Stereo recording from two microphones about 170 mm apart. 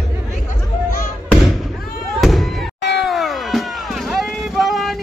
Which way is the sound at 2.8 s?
90° left.